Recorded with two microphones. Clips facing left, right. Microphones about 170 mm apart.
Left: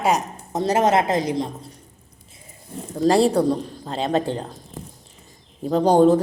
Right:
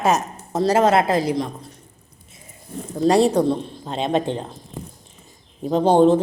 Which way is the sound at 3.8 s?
20° right (ahead or behind).